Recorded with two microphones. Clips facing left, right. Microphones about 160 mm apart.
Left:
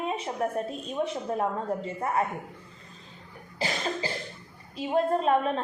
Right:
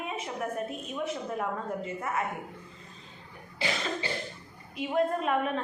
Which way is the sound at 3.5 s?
40° left (ahead or behind).